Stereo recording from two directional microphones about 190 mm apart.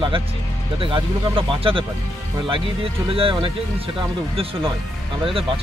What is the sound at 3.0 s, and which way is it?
Speech, 30° right (ahead or behind).